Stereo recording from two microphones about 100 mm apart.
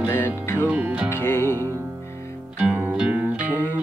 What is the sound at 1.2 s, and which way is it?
Music, 25° left (ahead or behind).